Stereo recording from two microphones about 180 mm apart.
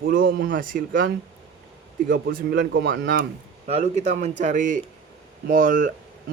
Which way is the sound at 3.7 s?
40° right (ahead or behind).